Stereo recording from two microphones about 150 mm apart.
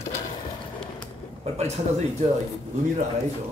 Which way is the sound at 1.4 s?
45° right (ahead or behind).